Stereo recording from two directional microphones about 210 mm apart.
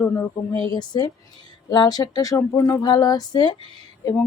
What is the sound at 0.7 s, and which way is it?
Speech, 20° left (ahead or behind).